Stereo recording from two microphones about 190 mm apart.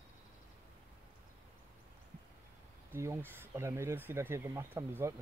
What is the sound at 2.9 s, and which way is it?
Speech, 15° right (ahead or behind).